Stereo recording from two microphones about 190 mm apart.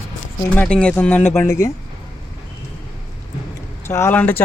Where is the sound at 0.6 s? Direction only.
5° left (ahead or behind).